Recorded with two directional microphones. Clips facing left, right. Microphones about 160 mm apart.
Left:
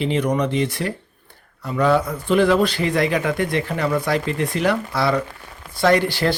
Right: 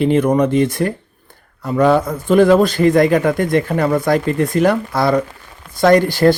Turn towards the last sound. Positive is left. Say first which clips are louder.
# right 6 dB
turn(degrees=-45)  # may be behind; listen again after turning